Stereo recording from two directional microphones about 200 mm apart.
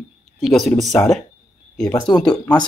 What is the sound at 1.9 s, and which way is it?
Speech, 20° left (ahead or behind).